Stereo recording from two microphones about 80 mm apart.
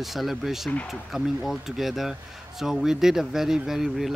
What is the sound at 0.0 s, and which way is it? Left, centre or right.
Speech, centre.